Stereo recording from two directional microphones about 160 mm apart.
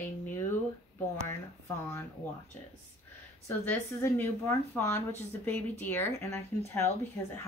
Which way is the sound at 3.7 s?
15° left (ahead or behind).